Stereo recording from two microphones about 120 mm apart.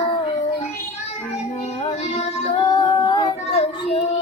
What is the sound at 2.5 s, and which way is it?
Singing, 40° left (ahead or behind).